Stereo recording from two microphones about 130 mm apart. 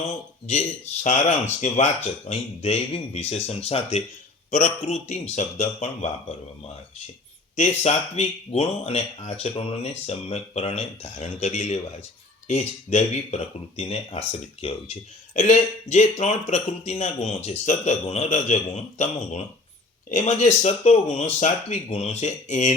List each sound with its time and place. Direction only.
0.1 s speech: 55° left (ahead or behind)
7.5 s speech: 65° left (ahead or behind)